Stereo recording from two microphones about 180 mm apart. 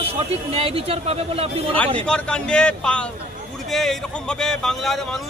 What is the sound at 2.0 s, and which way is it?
Speech, 5° left (ahead or behind).